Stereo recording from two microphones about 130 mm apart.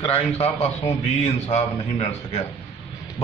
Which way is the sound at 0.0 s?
50° left (ahead or behind).